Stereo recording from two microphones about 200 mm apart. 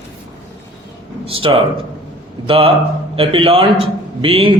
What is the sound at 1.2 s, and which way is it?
A man's voice, 25° right (ahead or behind).